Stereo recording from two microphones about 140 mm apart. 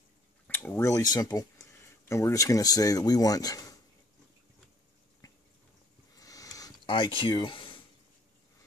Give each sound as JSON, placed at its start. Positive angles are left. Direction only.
{"t": 0.5, "sound": "speech", "side_deg": 15}
{"t": 5.2, "sound": "a sound", "side_deg": 25}
{"t": 6.9, "sound": "speech", "side_deg": 35}